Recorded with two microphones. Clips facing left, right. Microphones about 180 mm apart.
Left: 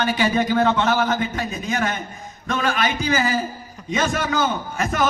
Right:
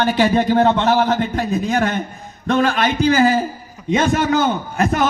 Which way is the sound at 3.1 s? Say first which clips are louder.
Right 8 dB; 55° right (ahead or behind).